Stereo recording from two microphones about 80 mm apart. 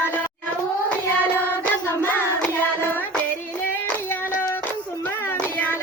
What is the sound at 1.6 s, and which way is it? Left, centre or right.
Hands, left.